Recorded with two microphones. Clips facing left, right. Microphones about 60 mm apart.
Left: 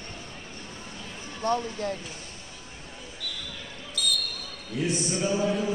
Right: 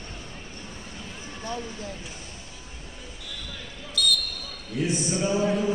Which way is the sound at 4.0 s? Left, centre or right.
Centre.